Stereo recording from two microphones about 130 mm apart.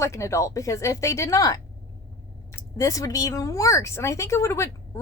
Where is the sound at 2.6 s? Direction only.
25° left (ahead or behind).